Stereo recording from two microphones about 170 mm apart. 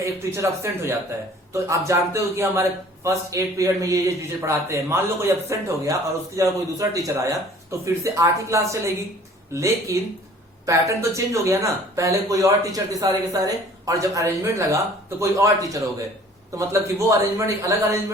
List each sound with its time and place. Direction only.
0.0 s speech: 15° right (ahead or behind)